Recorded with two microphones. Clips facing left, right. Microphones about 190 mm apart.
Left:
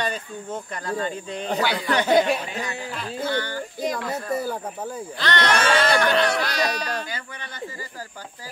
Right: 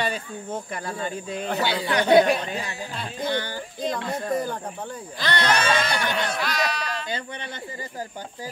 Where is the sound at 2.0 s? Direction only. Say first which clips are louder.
Right 3 dB; centre (ahead or behind).